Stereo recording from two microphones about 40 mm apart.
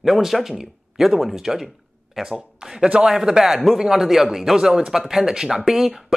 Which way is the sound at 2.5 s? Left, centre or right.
Centre.